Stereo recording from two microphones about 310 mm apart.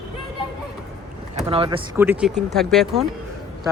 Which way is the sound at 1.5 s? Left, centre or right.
Centre.